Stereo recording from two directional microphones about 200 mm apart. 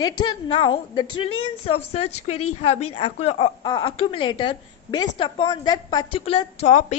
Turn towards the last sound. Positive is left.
turn(degrees=35)  # may be behind; listen again after turning